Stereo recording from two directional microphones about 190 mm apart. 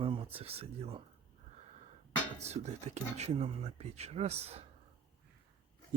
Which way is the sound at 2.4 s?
35° right (ahead or behind).